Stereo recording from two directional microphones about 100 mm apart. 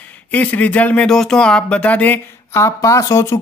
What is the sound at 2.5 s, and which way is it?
Speech, 30° left (ahead or behind).